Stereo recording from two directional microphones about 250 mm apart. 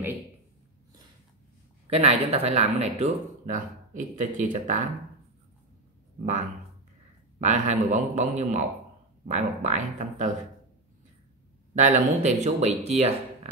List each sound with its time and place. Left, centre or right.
1.9 s speech: right
7.3 s speech: right
11.7 s speech: right